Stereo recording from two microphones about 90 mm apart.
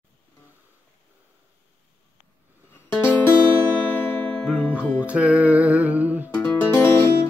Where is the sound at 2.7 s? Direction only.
25° left (ahead or behind).